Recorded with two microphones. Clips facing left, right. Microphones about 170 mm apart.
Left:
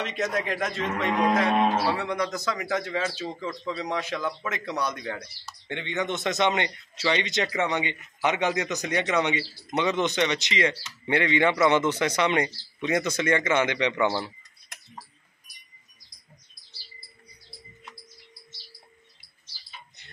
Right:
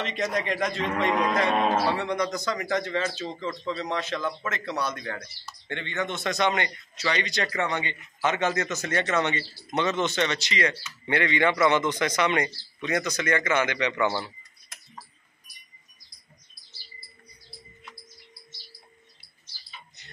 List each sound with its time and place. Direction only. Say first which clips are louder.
0.0 s speech: even; 5° left (ahead or behind); by 14.0 s 25° left (ahead or behind)